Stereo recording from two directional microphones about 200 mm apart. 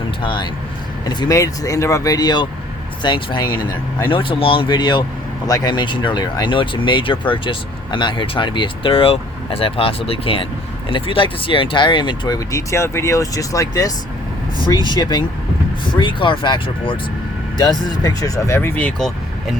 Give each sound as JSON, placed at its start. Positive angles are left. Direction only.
{"t": 0.2, "sound": "speech", "side_deg": 25}